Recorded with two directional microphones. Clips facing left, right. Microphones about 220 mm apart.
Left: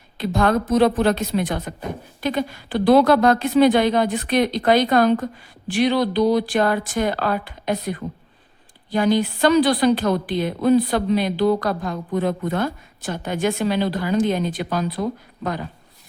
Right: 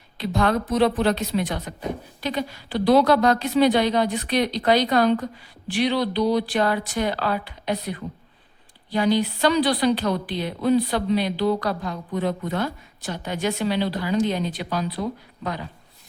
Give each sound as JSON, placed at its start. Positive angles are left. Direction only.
{"t": 0.2, "sound": "a woman's voice", "side_deg": 50}